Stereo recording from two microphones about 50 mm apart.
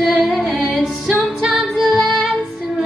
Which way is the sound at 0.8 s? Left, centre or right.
Centre.